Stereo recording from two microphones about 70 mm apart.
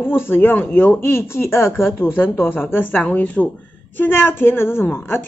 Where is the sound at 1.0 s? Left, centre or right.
Left.